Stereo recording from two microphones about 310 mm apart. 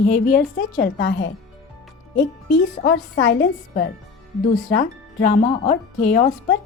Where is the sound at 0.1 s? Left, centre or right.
Left.